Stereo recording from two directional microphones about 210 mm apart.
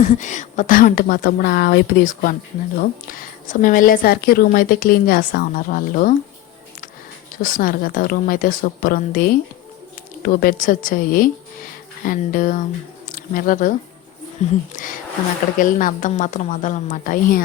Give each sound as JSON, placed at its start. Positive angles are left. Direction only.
{"t": 0.0, "sound": "a woman's voice", "side_deg": 35}
{"t": 7.3, "sound": "a woman's voice", "side_deg": 40}
{"t": 10.2, "sound": "a woman's voice", "side_deg": 40}